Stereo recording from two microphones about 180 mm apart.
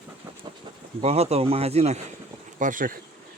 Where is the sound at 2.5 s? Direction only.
45° right (ahead or behind).